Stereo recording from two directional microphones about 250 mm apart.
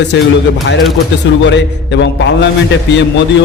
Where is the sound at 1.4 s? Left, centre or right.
Left.